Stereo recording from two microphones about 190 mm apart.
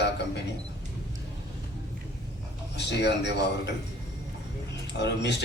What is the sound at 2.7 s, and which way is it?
Speech, 65° left (ahead or behind).